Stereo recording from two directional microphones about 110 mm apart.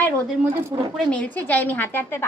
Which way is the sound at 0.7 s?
45° right (ahead or behind).